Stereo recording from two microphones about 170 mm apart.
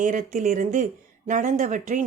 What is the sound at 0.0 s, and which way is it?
A woman's voice, 45° right (ahead or behind).